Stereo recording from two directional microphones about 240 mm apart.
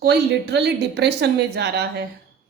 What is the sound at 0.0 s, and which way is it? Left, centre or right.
A woman's voice, right.